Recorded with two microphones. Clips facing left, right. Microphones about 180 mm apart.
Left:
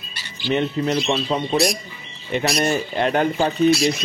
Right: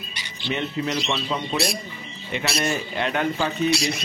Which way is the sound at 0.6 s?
35° left (ahead or behind).